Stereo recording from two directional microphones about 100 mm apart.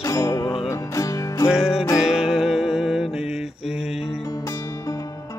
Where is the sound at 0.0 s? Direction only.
30° left (ahead or behind).